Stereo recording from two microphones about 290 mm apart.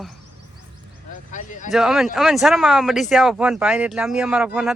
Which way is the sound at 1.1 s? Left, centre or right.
Left.